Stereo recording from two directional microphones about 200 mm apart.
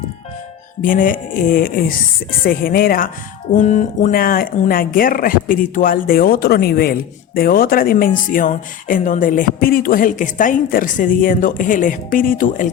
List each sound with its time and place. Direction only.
0.8 s speech: 45° left (ahead or behind)